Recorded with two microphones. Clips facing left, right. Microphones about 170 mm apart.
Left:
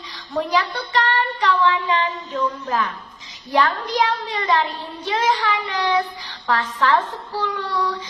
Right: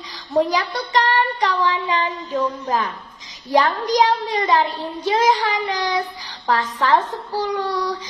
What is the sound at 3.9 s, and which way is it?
Speech, 40° right (ahead or behind).